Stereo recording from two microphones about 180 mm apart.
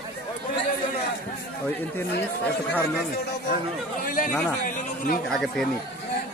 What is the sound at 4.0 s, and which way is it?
Speech, 50° left (ahead or behind).